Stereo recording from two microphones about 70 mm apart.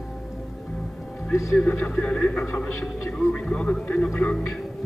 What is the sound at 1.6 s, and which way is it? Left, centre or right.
A man's voice, centre.